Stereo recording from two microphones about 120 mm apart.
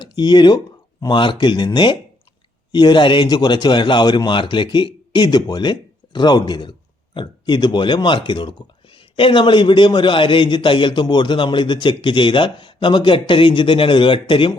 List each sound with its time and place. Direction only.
0.0 s speech: 35° left (ahead or behind)